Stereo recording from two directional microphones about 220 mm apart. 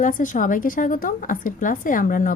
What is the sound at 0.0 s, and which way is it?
A woman's voice, 35° left (ahead or behind).